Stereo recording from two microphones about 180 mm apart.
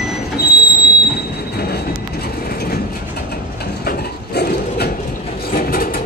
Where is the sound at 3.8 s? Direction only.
60° left (ahead or behind).